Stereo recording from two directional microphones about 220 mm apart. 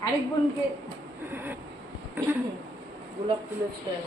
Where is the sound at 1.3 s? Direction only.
10° right (ahead or behind).